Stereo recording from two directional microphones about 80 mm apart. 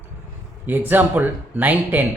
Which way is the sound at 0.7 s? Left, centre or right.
Right.